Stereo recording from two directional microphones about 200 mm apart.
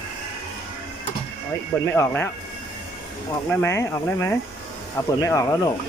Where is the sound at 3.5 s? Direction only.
10° left (ahead or behind).